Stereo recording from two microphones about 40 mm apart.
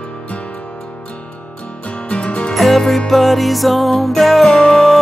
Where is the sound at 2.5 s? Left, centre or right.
Centre.